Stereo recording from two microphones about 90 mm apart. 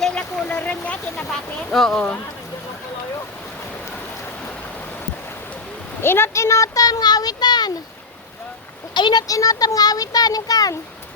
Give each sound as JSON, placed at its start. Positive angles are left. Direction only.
{"t": 0.0, "sound": "a sound", "side_deg": 10}
{"t": 1.3, "sound": "speech", "side_deg": 5}
{"t": 6.0, "sound": "speech", "side_deg": 25}
{"t": 9.0, "sound": "speech", "side_deg": 55}
{"t": 9.2, "sound": "speech", "side_deg": 40}